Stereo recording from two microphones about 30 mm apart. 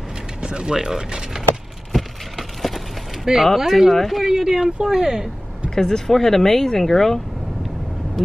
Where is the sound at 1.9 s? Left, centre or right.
Centre.